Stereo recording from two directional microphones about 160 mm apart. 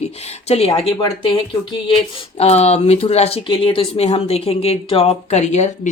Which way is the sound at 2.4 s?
40° left (ahead or behind).